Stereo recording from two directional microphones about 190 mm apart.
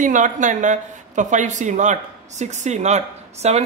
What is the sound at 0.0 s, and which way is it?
Speech, 40° right (ahead or behind).